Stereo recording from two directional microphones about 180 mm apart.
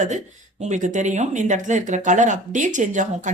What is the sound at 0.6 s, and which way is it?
A woman's voice, 45° right (ahead or behind).